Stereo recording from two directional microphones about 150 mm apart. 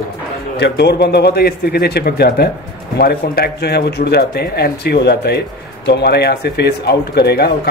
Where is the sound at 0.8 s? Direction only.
90° left.